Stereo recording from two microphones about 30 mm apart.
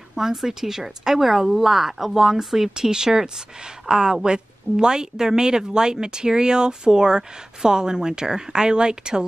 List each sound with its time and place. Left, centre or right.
0.1 s a woman's voice: centre